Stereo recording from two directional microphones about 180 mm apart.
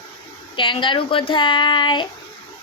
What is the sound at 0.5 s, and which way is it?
Speech, 30° left (ahead or behind).